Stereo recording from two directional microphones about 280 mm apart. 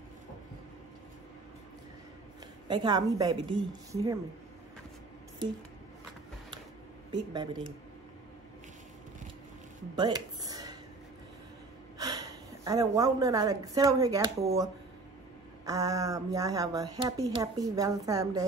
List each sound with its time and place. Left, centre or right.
2.7 s speech: centre
7.1 s speech: centre
9.9 s a sound: centre
12.0 s a woman's voice: centre